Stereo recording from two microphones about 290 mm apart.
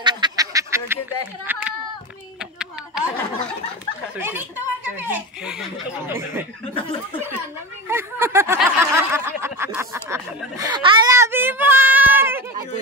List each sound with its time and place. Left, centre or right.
0.0 s duck: centre
1.4 s speech: centre
4.2 s speech: centre
4.9 s a sound: centre
6.0 s speech: centre
6.7 s speech: centre
7.9 s snicker: centre